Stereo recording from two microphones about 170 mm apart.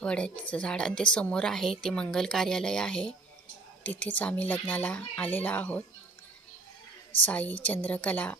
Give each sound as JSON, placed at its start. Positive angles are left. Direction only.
{"t": 0.0, "sound": "a woman's voice", "side_deg": 5}
{"t": 7.3, "sound": "speech", "side_deg": 10}